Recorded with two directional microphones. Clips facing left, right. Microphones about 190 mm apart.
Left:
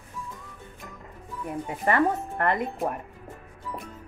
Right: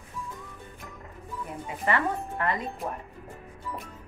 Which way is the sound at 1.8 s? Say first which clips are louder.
Left 4 dB; 50° left (ahead or behind).